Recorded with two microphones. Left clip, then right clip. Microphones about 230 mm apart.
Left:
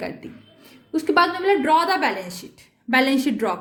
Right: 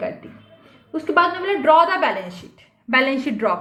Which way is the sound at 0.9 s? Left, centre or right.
Left.